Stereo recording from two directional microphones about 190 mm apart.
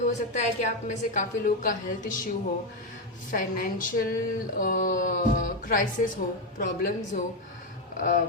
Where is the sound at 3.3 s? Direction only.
45° left (ahead or behind).